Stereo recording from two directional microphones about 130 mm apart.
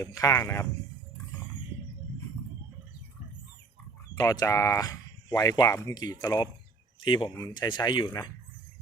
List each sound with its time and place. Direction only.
0.0 s speech: 25° left (ahead or behind)
4.1 s speech: 30° left (ahead or behind)